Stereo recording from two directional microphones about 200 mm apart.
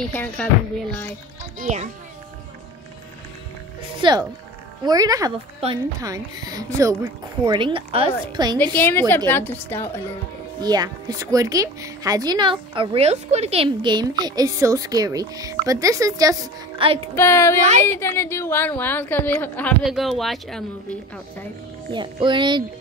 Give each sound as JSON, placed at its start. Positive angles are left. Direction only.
{"t": 0.0, "sound": "a woman's voice", "side_deg": 5}
{"t": 1.6, "sound": "a child's voice", "side_deg": -35}
{"t": 4.0, "sound": "a woman's voice", "side_deg": -20}
{"t": 8.7, "sound": "a woman's voice", "side_deg": 10}
{"t": 10.6, "sound": "a woman's voice", "side_deg": -20}
{"t": 17.1, "sound": "a woman's voice", "side_deg": 15}
{"t": 21.9, "sound": "a woman's voice", "side_deg": -25}